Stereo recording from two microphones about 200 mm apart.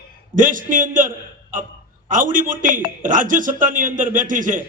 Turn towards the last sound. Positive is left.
turn(degrees=-40)  # may be behind; listen again after turning